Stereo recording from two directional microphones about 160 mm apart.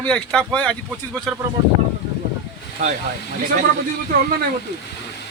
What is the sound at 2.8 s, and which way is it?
Speech, 50° right (ahead or behind).